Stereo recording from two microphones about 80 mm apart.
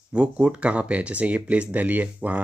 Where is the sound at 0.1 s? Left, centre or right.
Centre.